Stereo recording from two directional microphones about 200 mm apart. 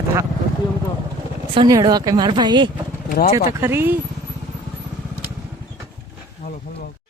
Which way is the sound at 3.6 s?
10° right (ahead or behind).